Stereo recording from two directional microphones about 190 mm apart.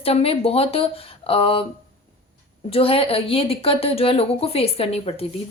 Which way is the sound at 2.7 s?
30° left (ahead or behind).